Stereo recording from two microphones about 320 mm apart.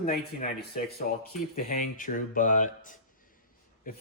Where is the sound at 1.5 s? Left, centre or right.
Left.